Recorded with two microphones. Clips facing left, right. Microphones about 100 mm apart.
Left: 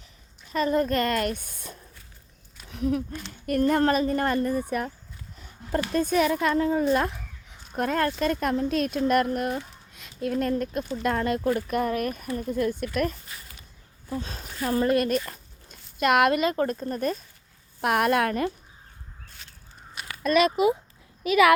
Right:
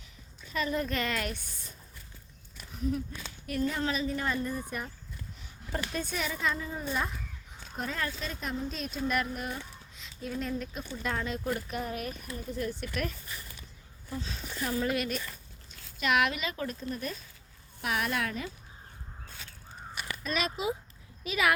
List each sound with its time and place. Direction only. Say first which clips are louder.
0.5 s a child's voice: left 8 dB; 40° left (ahead or behind); by 1.8 s 60° left (ahead or behind)
2.6 s speech: left 6 dB; 75° left (ahead or behind)
5.4 s speech: left 9 dB; 45° left (ahead or behind); by 7.2 s 70° left (ahead or behind)
7.8 s a child's voice: left 11 dB; 55° left (ahead or behind)
17.7 s speech: left 9 dB; 55° left (ahead or behind)
20.2 s speech: left 12 dB; 70° left (ahead or behind)
21.2 s speech: left 10 dB; 75° left (ahead or behind)